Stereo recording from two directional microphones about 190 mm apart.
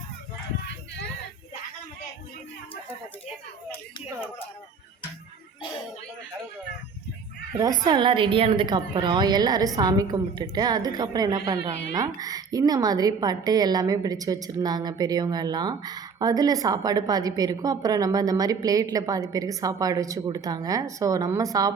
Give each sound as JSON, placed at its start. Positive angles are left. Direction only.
{"t": 7.9, "sound": "a woman's voice", "side_deg": -25}